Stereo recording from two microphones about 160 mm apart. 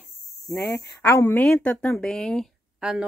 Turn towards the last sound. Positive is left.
turn(degrees=-5)  # may be behind; listen again after turning